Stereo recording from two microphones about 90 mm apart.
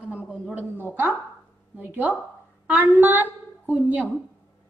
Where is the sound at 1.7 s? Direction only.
20° right (ahead or behind).